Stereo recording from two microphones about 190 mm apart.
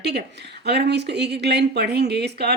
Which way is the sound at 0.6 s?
60° right (ahead or behind).